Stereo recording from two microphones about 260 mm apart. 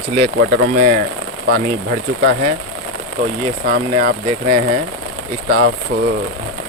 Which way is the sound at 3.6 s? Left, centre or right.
Right.